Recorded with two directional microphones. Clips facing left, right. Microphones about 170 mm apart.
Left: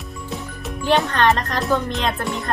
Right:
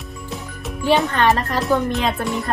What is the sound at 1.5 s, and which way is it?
A woman's voice, centre (ahead or behind).